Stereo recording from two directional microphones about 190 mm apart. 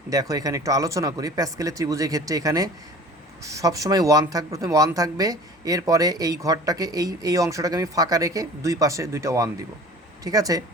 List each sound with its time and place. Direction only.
0.1 s speech: 20° right (ahead or behind)